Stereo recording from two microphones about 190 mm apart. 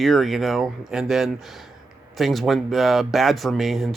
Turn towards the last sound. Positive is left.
turn(degrees=0)  # may be behind; listen again after turning